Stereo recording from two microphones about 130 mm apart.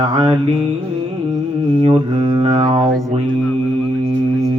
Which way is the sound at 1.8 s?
45° right (ahead or behind).